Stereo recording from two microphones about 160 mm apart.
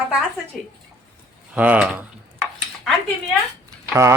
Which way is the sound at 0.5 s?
5° left (ahead or behind).